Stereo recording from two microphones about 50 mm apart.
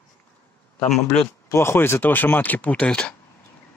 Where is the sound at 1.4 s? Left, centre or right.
Left.